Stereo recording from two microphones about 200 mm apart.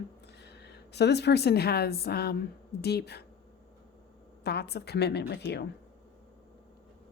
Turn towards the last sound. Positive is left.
turn(degrees=60)  # may be behind; listen again after turning